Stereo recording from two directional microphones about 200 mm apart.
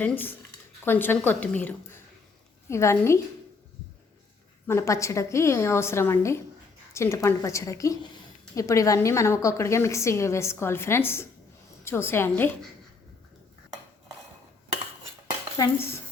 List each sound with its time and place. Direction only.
0.0 s a woman's voice: 10° left (ahead or behind)
4.7 s a woman's voice: 15° left (ahead or behind)
15.5 s a woman's voice: 15° left (ahead or behind)